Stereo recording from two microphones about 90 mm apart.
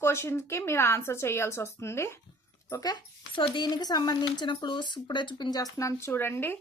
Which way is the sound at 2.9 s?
65° left (ahead or behind).